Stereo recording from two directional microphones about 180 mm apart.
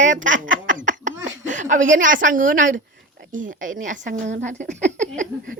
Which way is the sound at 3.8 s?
45° right (ahead or behind).